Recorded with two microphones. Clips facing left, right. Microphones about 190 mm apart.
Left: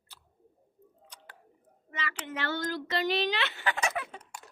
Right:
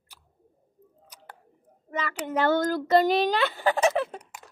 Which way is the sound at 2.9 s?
50° right (ahead or behind).